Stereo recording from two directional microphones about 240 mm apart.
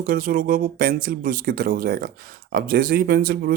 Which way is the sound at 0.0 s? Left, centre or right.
Right.